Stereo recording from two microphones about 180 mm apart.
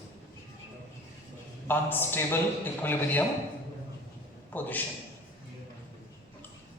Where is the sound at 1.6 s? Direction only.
10° left (ahead or behind).